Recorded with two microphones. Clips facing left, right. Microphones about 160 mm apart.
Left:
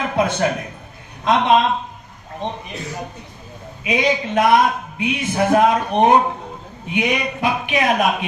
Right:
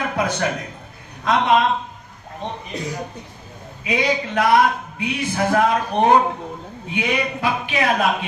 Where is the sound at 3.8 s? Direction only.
20° left (ahead or behind).